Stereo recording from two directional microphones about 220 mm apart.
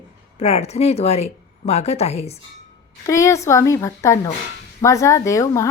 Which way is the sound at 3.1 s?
15° left (ahead or behind).